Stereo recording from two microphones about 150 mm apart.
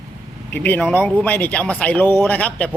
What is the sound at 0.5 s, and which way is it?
Speech, 10° left (ahead or behind).